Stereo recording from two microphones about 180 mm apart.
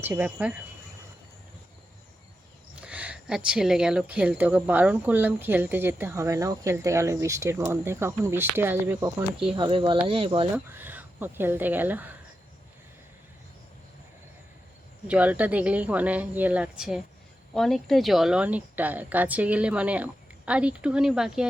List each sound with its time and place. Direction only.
0.0 s speech: 10° right (ahead or behind)
2.8 s speech: 10° right (ahead or behind)
9.6 s speech: 25° right (ahead or behind)
10.5 s speech: 10° right (ahead or behind)
15.0 s speech: 5° right (ahead or behind)